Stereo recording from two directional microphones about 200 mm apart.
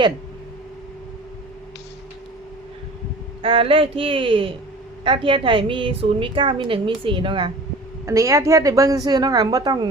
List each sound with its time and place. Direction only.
3.4 s a woman's voice: 25° right (ahead or behind)